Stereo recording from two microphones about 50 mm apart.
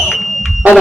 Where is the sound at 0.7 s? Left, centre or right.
Right.